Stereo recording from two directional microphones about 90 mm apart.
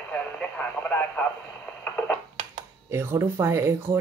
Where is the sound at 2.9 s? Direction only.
30° right (ahead or behind).